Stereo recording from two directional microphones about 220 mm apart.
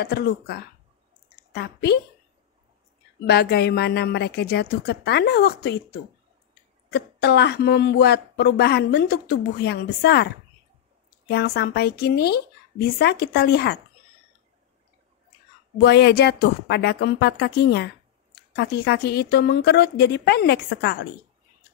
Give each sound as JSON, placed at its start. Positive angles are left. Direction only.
{"t": 0.0, "sound": "a woman's voice", "side_deg": 45}
{"t": 3.3, "sound": "a woman's voice", "side_deg": 45}
{"t": 15.8, "sound": "a woman's voice", "side_deg": 50}